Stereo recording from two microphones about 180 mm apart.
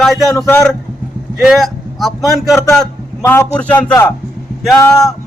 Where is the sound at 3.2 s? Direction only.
15° left (ahead or behind).